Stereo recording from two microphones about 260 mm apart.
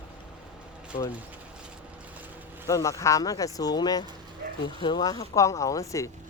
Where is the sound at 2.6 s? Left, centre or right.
Centre.